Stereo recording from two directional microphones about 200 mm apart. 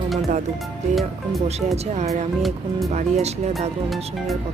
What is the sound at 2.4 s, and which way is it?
Speech, centre (ahead or behind).